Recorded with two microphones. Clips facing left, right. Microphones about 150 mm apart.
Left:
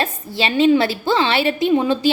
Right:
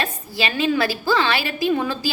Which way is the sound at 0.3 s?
25° left (ahead or behind).